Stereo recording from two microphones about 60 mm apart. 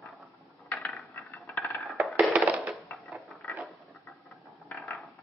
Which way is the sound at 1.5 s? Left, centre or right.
Left.